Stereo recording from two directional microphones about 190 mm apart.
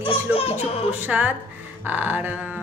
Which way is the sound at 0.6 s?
10° right (ahead or behind).